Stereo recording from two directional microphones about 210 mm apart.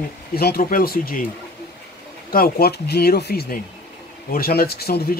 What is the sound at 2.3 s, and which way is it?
A man's voice, 45° left (ahead or behind).